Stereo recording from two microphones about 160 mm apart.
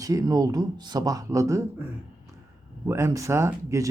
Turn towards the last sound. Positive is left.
turn(degrees=-20)  # may be behind; listen again after turning